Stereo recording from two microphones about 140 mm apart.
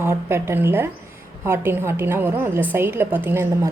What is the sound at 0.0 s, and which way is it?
A woman's voice, 20° right (ahead or behind).